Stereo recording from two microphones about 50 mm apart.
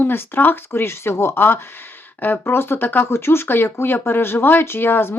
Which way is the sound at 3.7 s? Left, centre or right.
Left.